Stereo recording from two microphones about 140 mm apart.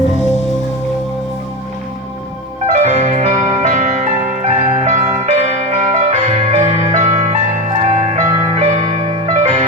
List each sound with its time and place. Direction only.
2.7 s music: 55° right (ahead or behind)